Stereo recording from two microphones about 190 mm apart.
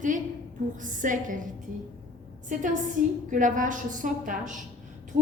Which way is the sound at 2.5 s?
40° right (ahead or behind).